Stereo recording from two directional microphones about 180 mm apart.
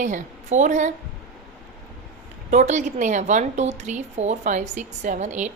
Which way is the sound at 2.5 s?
40° right (ahead or behind).